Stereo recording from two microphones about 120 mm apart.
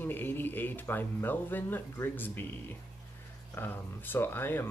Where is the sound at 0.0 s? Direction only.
15° left (ahead or behind).